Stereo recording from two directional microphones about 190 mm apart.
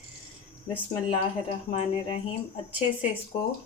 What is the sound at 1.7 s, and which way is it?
Speech, 30° left (ahead or behind).